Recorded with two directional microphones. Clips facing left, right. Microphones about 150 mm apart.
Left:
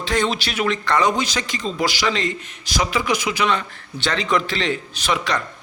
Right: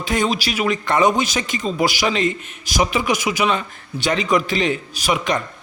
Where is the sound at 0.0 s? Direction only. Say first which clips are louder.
Right 1 dB; 15° right (ahead or behind).